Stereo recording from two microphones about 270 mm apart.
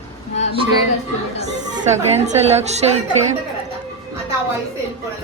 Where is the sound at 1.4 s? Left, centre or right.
Right.